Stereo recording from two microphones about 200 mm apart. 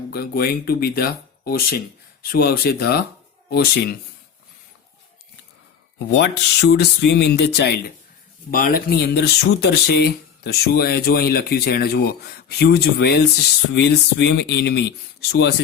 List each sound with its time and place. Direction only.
0.1 s speech: 50° left (ahead or behind)
6.1 s speech: 55° left (ahead or behind)